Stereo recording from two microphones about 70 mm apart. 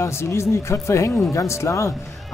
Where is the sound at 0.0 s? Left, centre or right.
Left.